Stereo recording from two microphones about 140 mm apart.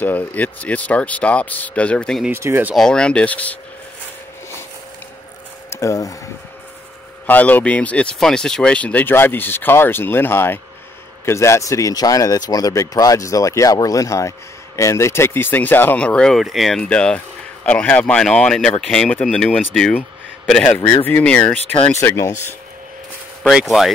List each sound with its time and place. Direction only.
0.0 s speech: 10° left (ahead or behind)
2.2 s speech: 15° right (ahead or behind)
2.7 s speech: 5° left (ahead or behind)
5.7 s speech: 20° left (ahead or behind)
7.2 s speech: 10° left (ahead or behind)
22.0 s speech: 20° left (ahead or behind)
23.5 s speech: centre (ahead or behind)